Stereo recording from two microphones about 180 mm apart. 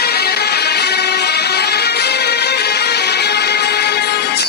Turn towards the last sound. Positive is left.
turn(degrees=65)  # may be behind; listen again after turning